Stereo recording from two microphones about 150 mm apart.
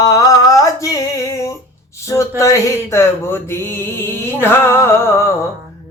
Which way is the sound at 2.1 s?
20° left (ahead or behind).